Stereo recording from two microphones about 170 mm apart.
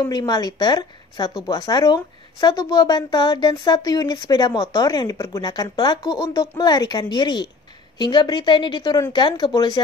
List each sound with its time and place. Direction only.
0.0 s speech: 25° left (ahead or behind)